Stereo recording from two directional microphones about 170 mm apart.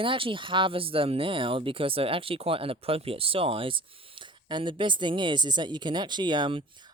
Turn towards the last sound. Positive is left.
turn(degrees=-25)  # may be behind; listen again after turning